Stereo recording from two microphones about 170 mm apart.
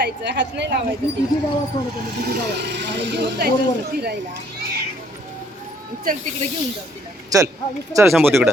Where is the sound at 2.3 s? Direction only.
80° right.